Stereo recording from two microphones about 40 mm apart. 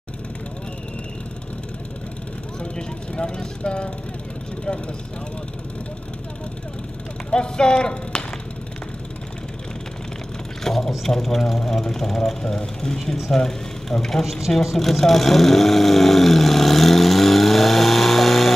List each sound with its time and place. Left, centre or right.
2.6 s vehicle: left
7.2 s speech: left
10.6 s speech: centre
14.2 s speech: centre
14.5 s vehicle: centre